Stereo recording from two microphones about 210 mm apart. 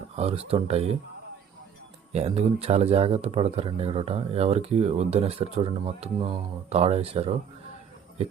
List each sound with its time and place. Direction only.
0.2 s speech: 30° right (ahead or behind)
2.1 s speech: 30° right (ahead or behind)